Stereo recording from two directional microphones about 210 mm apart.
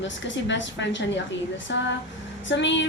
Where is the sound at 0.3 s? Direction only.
60° left (ahead or behind).